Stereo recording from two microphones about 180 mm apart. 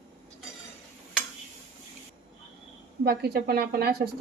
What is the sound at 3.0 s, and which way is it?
Speech, 60° right (ahead or behind).